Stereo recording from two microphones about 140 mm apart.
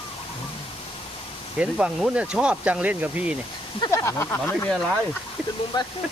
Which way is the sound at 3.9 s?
20° left (ahead or behind).